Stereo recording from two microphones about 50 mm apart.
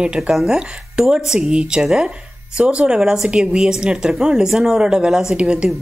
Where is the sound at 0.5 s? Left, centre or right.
Centre.